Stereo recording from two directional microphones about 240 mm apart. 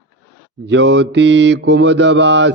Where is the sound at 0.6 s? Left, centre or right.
Right.